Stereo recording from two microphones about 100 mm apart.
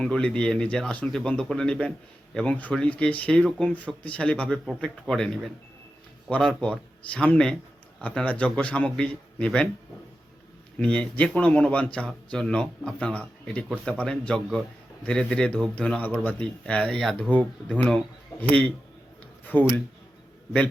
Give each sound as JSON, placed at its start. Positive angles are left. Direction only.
{"t": 0.0, "sound": "a man's voice", "side_deg": 10}
{"t": 10.8, "sound": "speech", "side_deg": 10}
{"t": 19.5, "sound": "speech", "side_deg": 20}